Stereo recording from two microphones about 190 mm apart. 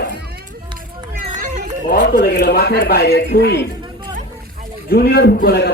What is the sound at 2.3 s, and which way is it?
A man's voice, 60° left (ahead or behind).